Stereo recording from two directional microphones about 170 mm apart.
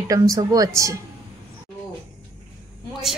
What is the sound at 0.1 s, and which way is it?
Speech, 20° right (ahead or behind).